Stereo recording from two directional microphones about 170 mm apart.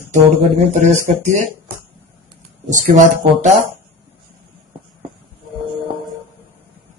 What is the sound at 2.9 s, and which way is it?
Speech, 45° right (ahead or behind).